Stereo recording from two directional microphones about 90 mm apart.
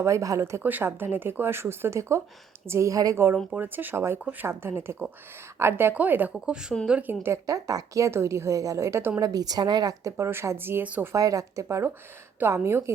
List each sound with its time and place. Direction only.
0.0 s a woman's voice: 35° right (ahead or behind)
0.6 s a woman's voice: 20° right (ahead or behind); by 3.2 s 40° right (ahead or behind)
3.5 s speech: 20° right (ahead or behind)
6.3 s speech: 10° right (ahead or behind)
7.1 s speech: 25° right (ahead or behind)
7.4 s a woman's voice: 40° right (ahead or behind)
9.2 s a woman's voice: 45° right (ahead or behind); by 11.1 s 20° right (ahead or behind)
11.1 s a woman's voice: 40° right (ahead or behind)